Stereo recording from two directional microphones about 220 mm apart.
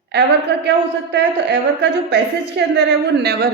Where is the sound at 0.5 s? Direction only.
50° right (ahead or behind).